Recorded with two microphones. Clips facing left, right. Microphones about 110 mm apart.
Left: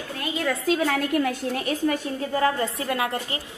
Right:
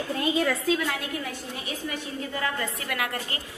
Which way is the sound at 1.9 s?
35° left (ahead or behind).